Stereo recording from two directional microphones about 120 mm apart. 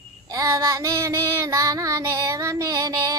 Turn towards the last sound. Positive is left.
turn(degrees=-30)  # may be behind; listen again after turning